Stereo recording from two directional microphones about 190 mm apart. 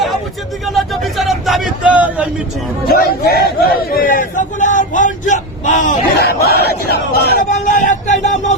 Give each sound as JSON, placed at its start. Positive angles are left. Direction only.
{"t": 0.6, "sound": "speech", "side_deg": 0}
{"t": 2.9, "sound": "speech", "side_deg": 55}
{"t": 6.1, "sound": "speech", "side_deg": 55}
{"t": 7.6, "sound": "a sound", "side_deg": 40}